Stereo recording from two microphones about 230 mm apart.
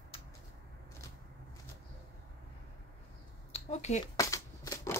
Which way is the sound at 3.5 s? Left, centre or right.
Left.